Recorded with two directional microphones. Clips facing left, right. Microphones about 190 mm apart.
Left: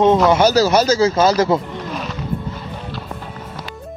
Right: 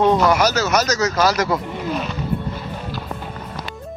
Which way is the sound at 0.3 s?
30° left (ahead or behind).